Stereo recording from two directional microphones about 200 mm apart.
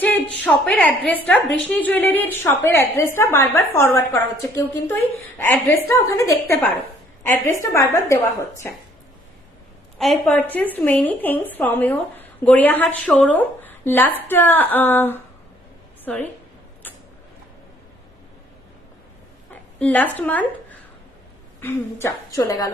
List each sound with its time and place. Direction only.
0.0 s a woman's voice: 5° left (ahead or behind)
10.0 s a woman's voice: centre (ahead or behind)
16.8 s a sound: 10° left (ahead or behind)
19.8 s a woman's voice: 10° left (ahead or behind)